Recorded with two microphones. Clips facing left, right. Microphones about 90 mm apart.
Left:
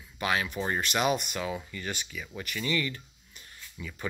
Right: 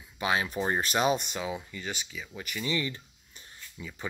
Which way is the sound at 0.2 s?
25° right (ahead or behind).